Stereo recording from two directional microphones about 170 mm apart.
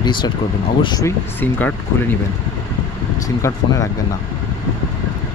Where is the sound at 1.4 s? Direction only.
10° left (ahead or behind).